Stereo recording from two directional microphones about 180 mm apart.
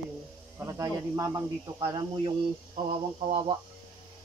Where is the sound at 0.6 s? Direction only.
15° right (ahead or behind).